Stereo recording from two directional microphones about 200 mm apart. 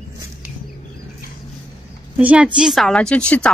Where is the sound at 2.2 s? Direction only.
5° right (ahead or behind).